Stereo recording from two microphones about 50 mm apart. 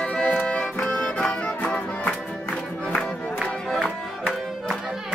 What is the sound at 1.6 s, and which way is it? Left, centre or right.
Music, left.